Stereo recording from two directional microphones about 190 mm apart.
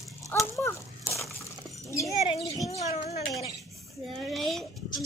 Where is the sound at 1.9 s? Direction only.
15° left (ahead or behind).